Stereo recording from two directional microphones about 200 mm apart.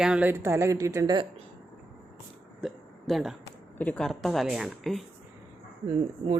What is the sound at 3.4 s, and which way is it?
Speech, 15° left (ahead or behind).